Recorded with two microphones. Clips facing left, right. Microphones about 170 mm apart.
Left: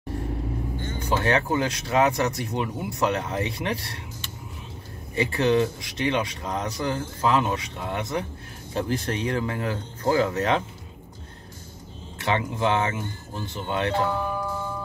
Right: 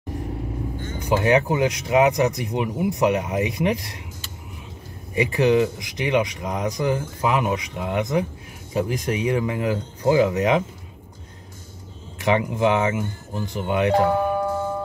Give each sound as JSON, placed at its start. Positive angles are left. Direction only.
{"t": 1.0, "sound": "speech", "side_deg": -15}
{"t": 5.1, "sound": "speech", "side_deg": -15}
{"t": 12.2, "sound": "speech", "side_deg": -15}
{"t": 13.9, "sound": "music", "side_deg": -55}